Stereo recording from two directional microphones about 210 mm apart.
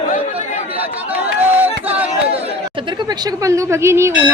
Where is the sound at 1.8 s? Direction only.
5° right (ahead or behind).